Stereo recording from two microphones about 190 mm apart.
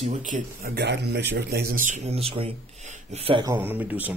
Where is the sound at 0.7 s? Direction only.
60° right (ahead or behind); by 3.4 s 30° right (ahead or behind).